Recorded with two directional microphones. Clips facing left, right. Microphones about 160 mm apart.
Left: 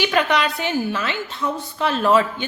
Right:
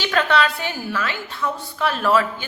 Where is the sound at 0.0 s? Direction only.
15° left (ahead or behind).